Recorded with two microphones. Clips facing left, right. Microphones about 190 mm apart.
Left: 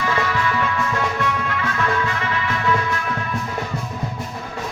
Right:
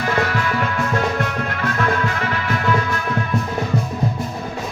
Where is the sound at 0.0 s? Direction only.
45° right (ahead or behind).